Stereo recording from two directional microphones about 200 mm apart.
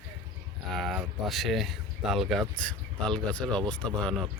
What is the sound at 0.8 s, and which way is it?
Speech, centre (ahead or behind).